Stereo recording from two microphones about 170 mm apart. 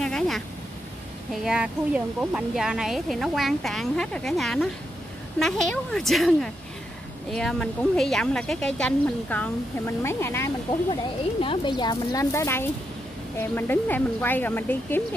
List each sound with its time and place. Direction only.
0.0 s a sound: 5° left (ahead or behind)
1.3 s speech: 5° right (ahead or behind); by 10.5 s 15° left (ahead or behind)
11.4 s speech: 30° left (ahead or behind); by 15.0 s 10° left (ahead or behind)